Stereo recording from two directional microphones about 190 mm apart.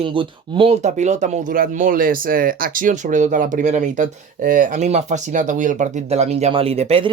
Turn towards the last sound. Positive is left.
turn(degrees=-30)  # may be behind; listen again after turning